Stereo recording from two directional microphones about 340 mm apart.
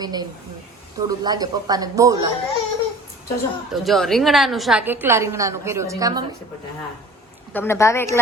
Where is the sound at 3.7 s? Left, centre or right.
Centre.